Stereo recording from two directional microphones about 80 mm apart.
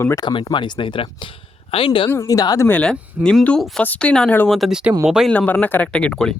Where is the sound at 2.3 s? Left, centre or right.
Left.